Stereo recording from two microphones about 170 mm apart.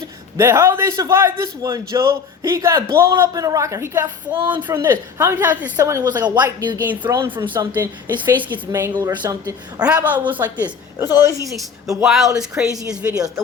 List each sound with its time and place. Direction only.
0.3 s a man's voice: 15° right (ahead or behind)
7.5 s a man's voice: 10° right (ahead or behind)
8.9 s speech: 20° right (ahead or behind)
9.8 s a man's voice: 10° right (ahead or behind)
11.1 s a woman's voice: 20° left (ahead or behind)
11.4 s speech: centre (ahead or behind)
13.1 s speech: 20° right (ahead or behind)